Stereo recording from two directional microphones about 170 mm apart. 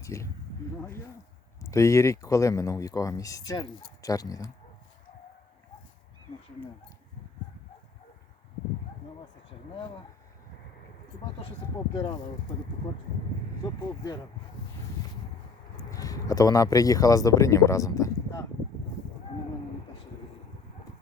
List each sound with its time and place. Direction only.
0.0 s speech: 15° left (ahead or behind)
1.6 s speech: 15° left (ahead or behind)
11.9 s speech: 25° left (ahead or behind)
13.6 s speech: 25° left (ahead or behind)
15.8 s speech: 20° left (ahead or behind)